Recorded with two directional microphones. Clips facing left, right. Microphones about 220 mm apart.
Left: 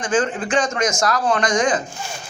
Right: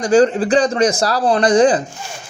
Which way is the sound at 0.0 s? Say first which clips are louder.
Right 8 dB; 40° right (ahead or behind).